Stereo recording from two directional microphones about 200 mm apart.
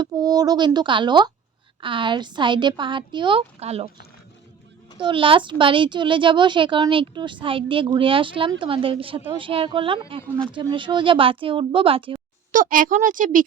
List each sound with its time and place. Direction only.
0.0 s a woman's voice: 20° right (ahead or behind)
4.9 s a woman's voice: 25° right (ahead or behind)
12.5 s speech: 40° right (ahead or behind)